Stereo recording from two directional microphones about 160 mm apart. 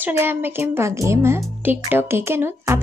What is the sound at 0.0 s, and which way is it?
Speech, 15° right (ahead or behind).